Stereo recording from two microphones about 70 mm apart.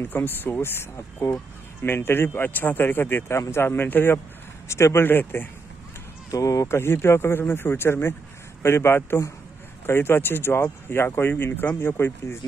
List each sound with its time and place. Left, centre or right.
0.0 s speech: left
4.6 s speech: left
6.3 s speech: left